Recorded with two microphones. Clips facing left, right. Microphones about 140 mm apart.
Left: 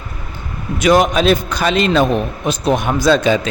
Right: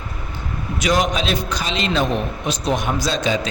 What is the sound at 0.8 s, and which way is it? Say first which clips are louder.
A man's voice: left 7 dB; 55° left (ahead or behind).